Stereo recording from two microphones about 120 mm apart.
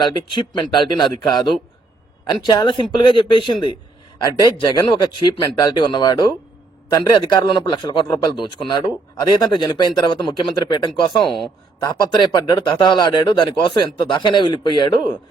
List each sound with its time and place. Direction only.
0.0 s speech: 40° left (ahead or behind)
11.3 s speech: centre (ahead or behind)
11.8 s speech: 35° left (ahead or behind)